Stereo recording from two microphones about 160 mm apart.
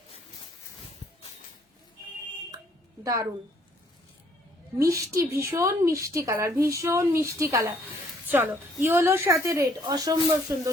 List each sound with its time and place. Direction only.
3.0 s a woman's voice: 15° right (ahead or behind)
4.8 s a woman's voice: 20° right (ahead or behind)